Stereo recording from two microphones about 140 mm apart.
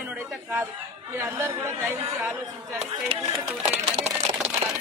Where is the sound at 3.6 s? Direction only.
55° right (ahead or behind).